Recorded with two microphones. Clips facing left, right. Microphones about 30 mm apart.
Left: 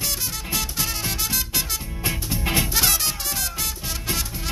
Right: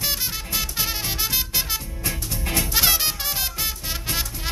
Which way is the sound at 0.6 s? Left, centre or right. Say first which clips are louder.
Right 1 dB; centre.